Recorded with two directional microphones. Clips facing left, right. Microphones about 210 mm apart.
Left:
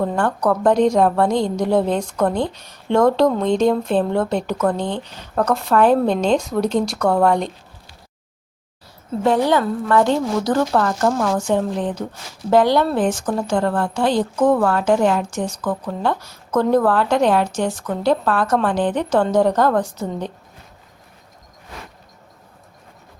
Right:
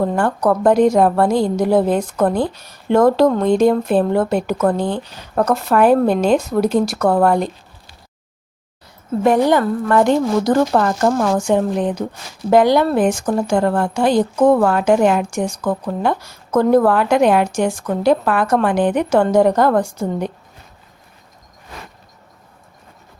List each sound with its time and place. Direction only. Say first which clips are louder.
0.0 s a woman's voice: right 2 dB; 5° right (ahead or behind)
9.2 s a woman's voice: right 3 dB; 15° right (ahead or behind)